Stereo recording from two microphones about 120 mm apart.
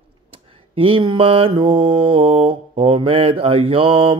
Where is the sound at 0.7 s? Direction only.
50° right (ahead or behind).